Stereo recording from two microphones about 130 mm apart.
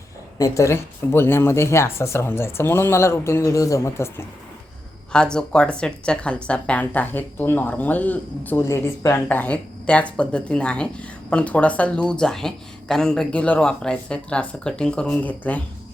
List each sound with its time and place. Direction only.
0.3 s speech: 25° left (ahead or behind)
5.1 s a woman's voice: 5° left (ahead or behind)